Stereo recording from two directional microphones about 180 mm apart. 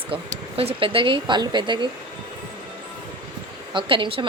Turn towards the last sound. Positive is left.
turn(degrees=-30)  # may be behind; listen again after turning